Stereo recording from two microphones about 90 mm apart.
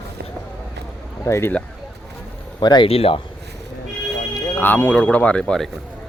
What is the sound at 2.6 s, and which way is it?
Speech, 50° left (ahead or behind).